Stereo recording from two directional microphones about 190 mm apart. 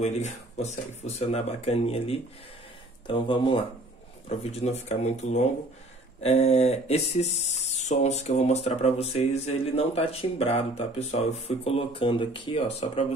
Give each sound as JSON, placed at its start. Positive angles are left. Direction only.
{"t": 0.0, "sound": "speech", "side_deg": 35}